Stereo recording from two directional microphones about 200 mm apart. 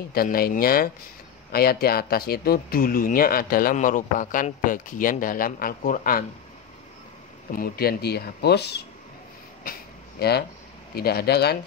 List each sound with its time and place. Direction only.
0.1 s speech: 50° left (ahead or behind)
7.5 s speech: 45° left (ahead or behind)
9.7 s a sound: 50° left (ahead or behind)
11.0 s speech: 50° left (ahead or behind)